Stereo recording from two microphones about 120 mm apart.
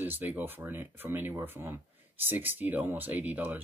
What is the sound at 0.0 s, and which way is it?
Speech, 15° right (ahead or behind).